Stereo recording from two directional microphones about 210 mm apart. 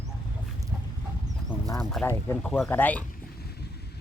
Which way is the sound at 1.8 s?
Centre (ahead or behind).